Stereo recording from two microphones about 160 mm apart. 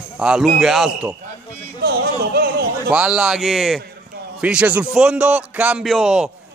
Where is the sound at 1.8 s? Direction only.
80° right.